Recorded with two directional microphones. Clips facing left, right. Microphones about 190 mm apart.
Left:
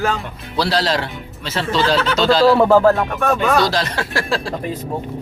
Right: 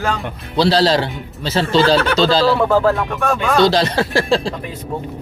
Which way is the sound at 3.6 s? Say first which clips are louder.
Right 4 dB; 30° right (ahead or behind).